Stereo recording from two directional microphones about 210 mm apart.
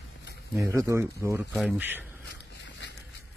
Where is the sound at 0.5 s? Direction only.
15° right (ahead or behind).